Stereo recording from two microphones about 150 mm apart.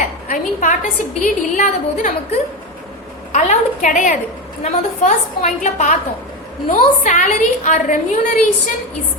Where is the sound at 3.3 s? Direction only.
55° left (ahead or behind).